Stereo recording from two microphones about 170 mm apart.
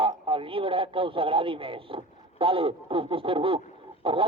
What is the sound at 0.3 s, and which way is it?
Speech, 30° right (ahead or behind).